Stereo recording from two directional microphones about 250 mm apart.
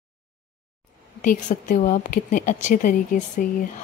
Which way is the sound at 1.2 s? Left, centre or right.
Left.